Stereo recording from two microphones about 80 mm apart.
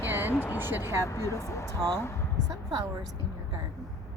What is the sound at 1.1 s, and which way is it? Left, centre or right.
Speech, left.